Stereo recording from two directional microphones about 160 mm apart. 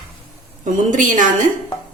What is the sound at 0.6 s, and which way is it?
Speech, 55° right (ahead or behind).